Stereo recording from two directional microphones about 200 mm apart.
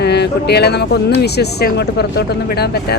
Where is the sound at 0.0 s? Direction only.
55° left (ahead or behind).